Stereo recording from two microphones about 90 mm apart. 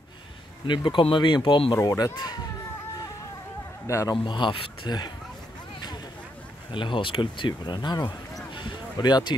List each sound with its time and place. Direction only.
0.7 s speech: 65° left (ahead or behind)
1.9 s speech: 45° left (ahead or behind)
3.8 s speech: 35° left (ahead or behind)
4.1 s speech: 60° left (ahead or behind)
6.7 s speech: 65° left (ahead or behind)
8.5 s a sound: 55° left (ahead or behind)